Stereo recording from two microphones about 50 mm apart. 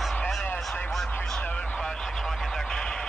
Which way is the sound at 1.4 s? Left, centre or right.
Left.